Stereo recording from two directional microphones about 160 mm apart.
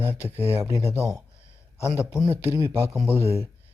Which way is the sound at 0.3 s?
10° right (ahead or behind).